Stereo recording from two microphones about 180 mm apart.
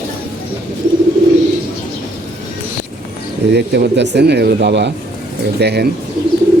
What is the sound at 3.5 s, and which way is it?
A man's voice, 65° right (ahead or behind).